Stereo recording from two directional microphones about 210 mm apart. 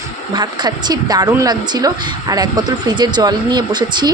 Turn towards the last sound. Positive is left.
turn(degrees=-20)  # may be behind; listen again after turning